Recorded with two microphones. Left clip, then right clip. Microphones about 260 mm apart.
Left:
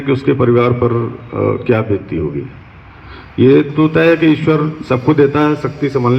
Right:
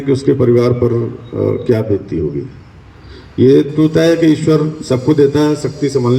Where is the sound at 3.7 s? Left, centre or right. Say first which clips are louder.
Even; right.